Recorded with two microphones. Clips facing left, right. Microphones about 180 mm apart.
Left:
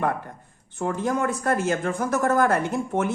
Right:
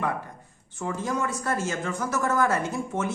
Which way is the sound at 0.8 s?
55° left (ahead or behind).